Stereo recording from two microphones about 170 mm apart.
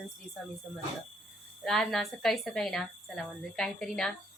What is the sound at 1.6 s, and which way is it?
A woman's voice, centre (ahead or behind).